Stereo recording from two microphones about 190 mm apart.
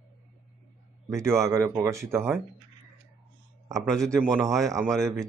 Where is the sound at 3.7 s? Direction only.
Centre (ahead or behind).